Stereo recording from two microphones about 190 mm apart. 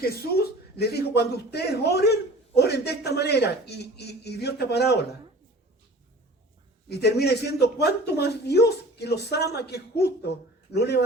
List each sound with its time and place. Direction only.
0.8 s speech: 60° left (ahead or behind)
6.9 s speech: 60° left (ahead or behind)